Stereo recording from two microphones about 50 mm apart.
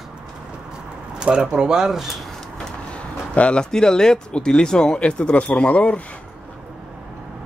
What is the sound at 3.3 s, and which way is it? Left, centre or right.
Speech, left.